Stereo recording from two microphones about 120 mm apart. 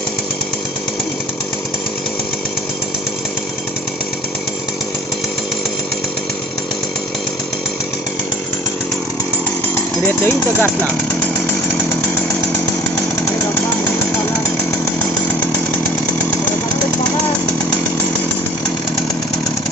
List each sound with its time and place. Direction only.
10.2 s speech: 15° left (ahead or behind)